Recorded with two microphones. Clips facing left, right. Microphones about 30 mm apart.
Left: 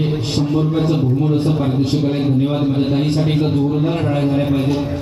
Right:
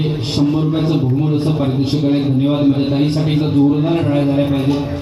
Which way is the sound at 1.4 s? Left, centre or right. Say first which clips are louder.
Right 1 dB; centre.